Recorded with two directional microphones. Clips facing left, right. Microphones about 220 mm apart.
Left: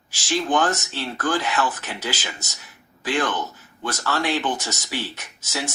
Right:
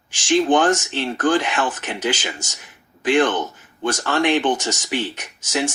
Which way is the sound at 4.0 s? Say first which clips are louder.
Right 5 dB; 15° right (ahead or behind).